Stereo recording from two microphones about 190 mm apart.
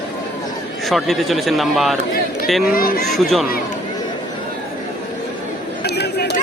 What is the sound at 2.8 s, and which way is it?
Speech, 50° left (ahead or behind).